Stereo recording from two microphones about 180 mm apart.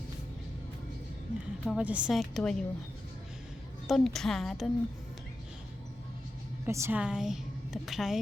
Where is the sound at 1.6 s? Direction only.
5° right (ahead or behind).